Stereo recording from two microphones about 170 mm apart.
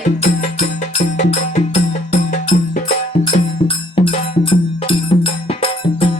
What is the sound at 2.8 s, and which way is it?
Music, 35° left (ahead or behind).